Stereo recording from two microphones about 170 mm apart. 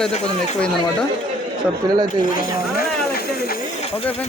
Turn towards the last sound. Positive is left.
turn(degrees=65)  # may be behind; listen again after turning